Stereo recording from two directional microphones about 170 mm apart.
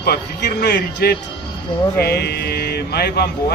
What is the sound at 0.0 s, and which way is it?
Speech, 70° left (ahead or behind).